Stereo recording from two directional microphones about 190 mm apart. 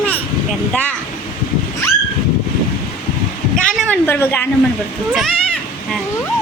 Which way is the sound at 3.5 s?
Centre (ahead or behind).